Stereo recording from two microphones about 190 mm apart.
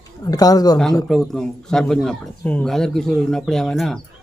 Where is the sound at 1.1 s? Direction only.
Centre (ahead or behind).